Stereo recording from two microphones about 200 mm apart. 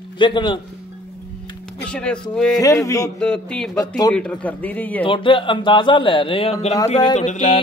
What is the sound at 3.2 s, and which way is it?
Speech, 5° left (ahead or behind).